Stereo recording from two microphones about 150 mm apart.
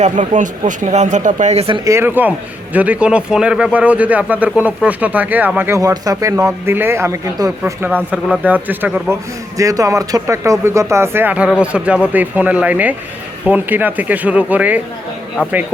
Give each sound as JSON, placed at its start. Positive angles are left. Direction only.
{"t": 0.0, "sound": "speech", "side_deg": -55}
{"t": 1.8, "sound": "speech", "side_deg": -20}
{"t": 7.6, "sound": "speech", "side_deg": -10}